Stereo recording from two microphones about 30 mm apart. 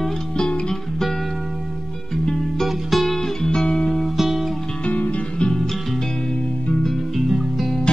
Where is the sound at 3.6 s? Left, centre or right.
Left.